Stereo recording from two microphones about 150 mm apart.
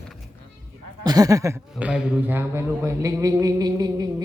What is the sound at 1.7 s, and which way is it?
A man's voice, 10° right (ahead or behind).